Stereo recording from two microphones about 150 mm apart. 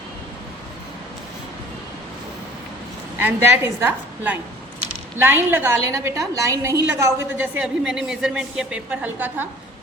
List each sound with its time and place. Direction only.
3.2 s a man's voice: 15° right (ahead or behind)